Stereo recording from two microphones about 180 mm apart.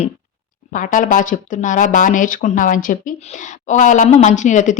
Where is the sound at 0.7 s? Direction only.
45° left (ahead or behind).